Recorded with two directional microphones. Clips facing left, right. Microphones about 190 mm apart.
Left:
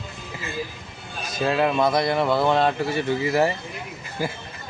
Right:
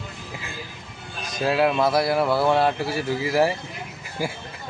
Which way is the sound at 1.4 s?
5° right (ahead or behind).